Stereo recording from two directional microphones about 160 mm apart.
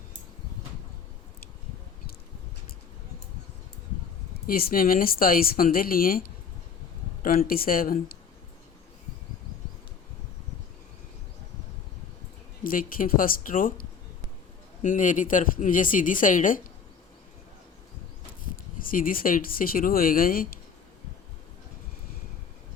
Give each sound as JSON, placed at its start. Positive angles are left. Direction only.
{"t": 4.4, "sound": "speech", "side_deg": 65}
{"t": 12.6, "sound": "speech", "side_deg": 60}
{"t": 18.8, "sound": "speech", "side_deg": 60}